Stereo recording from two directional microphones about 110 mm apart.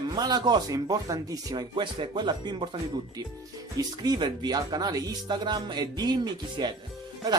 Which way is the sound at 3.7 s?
35° right (ahead or behind).